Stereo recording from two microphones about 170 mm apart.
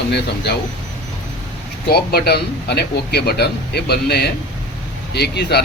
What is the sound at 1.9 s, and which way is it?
A man's voice, 70° left (ahead or behind).